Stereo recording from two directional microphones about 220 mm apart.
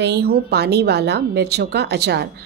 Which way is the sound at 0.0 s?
45° right (ahead or behind).